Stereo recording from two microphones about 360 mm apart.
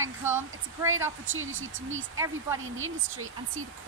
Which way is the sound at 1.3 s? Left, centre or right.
Right.